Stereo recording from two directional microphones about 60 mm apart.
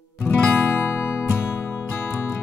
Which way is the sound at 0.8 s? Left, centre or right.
Left.